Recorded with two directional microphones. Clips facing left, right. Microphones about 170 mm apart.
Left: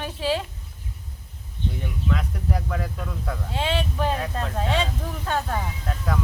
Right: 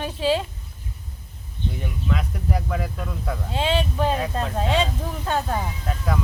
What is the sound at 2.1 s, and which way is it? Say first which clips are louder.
Speech: right 2 dB; 10° right (ahead or behind).